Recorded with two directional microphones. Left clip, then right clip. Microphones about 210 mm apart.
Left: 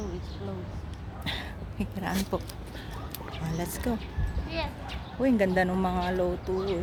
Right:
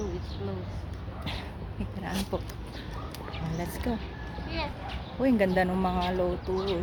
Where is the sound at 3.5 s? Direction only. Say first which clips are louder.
Left 2 dB; 15° left (ahead or behind).